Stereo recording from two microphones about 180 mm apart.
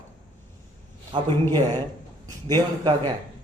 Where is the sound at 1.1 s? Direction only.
25° right (ahead or behind).